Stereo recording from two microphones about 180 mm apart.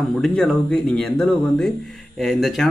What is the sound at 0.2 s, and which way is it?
A man's voice, 5° left (ahead or behind).